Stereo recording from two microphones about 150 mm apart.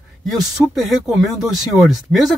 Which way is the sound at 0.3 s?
Centre (ahead or behind).